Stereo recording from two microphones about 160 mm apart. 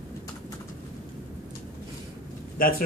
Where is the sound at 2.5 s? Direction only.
65° left (ahead or behind).